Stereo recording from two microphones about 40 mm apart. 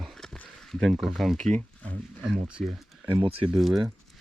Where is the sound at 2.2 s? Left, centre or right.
Right.